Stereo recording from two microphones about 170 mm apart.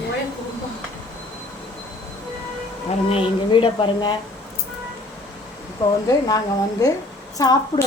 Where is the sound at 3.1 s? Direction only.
30° left (ahead or behind).